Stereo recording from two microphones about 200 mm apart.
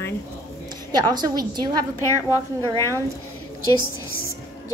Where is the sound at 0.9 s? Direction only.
20° right (ahead or behind).